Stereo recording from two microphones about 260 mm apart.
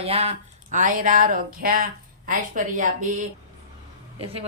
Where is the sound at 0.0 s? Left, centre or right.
Right.